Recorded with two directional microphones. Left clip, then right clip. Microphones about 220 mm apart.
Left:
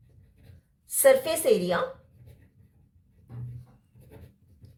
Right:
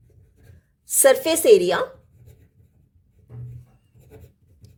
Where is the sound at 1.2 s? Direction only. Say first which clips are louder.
Right 9 dB; 45° right (ahead or behind).